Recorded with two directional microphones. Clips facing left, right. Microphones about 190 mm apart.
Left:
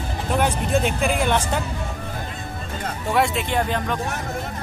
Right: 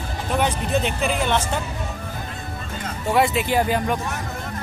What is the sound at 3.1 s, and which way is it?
Speech, centre (ahead or behind).